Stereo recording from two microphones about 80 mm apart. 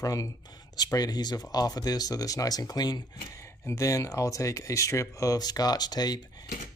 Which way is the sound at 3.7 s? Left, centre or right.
Left.